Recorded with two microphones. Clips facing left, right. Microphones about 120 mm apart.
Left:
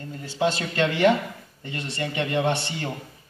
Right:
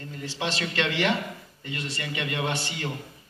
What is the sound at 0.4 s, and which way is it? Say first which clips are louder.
A man's voice: left 6 dB; 45° left (ahead or behind).